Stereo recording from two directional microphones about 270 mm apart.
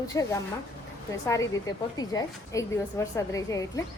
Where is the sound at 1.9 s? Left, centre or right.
Centre.